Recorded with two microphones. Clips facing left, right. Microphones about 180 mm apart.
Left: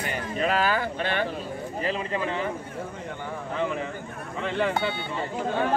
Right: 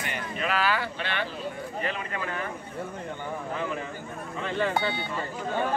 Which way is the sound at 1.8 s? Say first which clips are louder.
Left 6 dB; 30° left (ahead or behind).